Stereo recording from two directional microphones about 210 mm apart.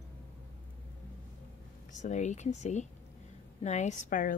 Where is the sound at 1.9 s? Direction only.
35° left (ahead or behind).